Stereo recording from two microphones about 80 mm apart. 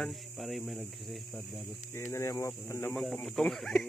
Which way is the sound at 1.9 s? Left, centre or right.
Left.